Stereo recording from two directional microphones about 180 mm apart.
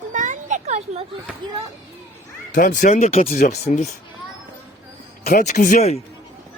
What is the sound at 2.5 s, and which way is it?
Speech, 45° left (ahead or behind).